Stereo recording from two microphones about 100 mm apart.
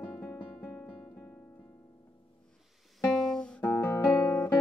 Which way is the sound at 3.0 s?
Centre (ahead or behind).